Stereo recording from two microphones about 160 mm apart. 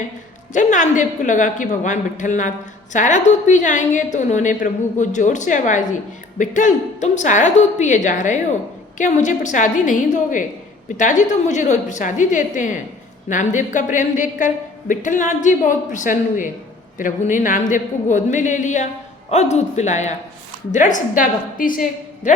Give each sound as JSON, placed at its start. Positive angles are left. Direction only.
{"t": 0.5, "sound": "a woman's voice", "side_deg": 50}